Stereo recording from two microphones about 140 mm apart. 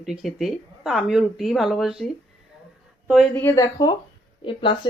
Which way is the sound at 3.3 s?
20° left (ahead or behind).